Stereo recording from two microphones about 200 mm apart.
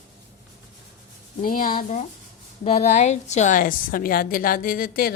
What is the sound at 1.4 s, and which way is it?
A woman's voice, 45° left (ahead or behind).